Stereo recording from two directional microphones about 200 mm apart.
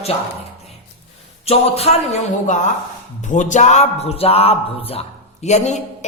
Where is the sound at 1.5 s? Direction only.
30° left (ahead or behind).